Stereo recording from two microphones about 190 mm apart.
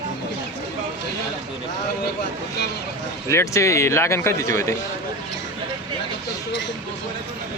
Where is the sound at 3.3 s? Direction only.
15° left (ahead or behind).